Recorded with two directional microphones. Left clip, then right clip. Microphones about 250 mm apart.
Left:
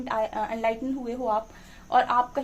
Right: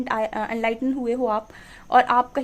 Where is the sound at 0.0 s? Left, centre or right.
Right.